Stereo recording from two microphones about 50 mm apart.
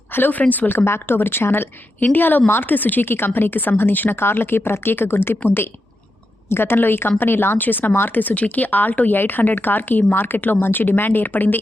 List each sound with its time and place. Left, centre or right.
0.1 s speech: left
0.9 s speech: left
6.5 s speech: left